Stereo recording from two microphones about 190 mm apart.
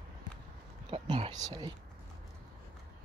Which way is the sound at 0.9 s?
30° right (ahead or behind).